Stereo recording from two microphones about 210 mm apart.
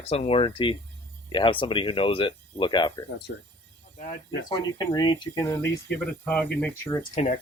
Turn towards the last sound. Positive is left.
turn(degrees=30)  # may be behind; listen again after turning